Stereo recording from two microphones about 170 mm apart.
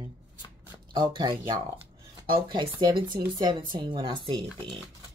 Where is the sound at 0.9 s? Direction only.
25° right (ahead or behind).